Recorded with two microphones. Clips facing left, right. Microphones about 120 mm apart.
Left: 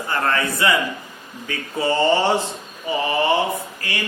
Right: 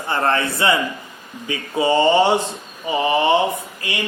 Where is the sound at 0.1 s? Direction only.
30° right (ahead or behind).